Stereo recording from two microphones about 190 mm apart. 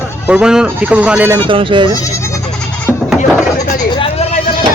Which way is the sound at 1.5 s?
25° right (ahead or behind).